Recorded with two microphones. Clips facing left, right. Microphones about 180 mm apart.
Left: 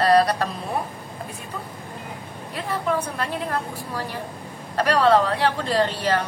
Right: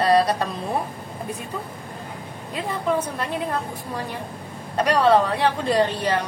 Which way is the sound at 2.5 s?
20° right (ahead or behind).